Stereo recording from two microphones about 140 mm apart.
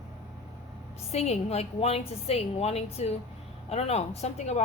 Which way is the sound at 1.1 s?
50° left (ahead or behind).